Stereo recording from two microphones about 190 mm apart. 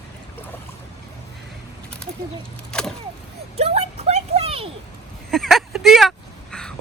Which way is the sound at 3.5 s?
30° right (ahead or behind).